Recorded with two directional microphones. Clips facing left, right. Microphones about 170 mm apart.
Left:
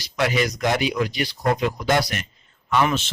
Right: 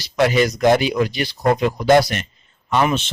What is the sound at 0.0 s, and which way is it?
Speech, 35° right (ahead or behind).